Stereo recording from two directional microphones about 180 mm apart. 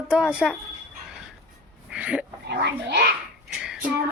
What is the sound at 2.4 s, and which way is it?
Speech, 65° right (ahead or behind).